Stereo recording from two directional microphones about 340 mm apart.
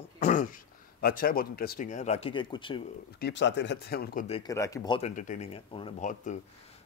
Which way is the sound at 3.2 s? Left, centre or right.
Left.